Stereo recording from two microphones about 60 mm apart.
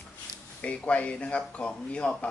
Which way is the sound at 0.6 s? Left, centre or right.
Left.